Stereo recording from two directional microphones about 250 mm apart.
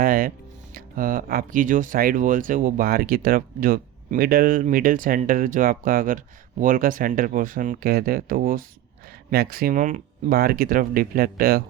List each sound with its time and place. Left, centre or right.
0.0 s speech: right